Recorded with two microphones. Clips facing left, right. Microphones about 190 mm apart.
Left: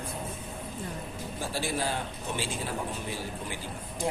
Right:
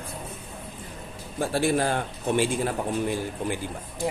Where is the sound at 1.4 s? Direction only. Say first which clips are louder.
Right 9 dB; 55° right (ahead or behind).